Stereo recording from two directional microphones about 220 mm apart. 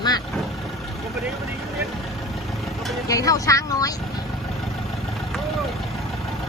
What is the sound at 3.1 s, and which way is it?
Speech, 15° left (ahead or behind).